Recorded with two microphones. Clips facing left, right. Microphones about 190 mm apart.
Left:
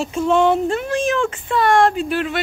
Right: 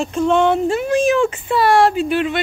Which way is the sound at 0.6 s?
10° right (ahead or behind).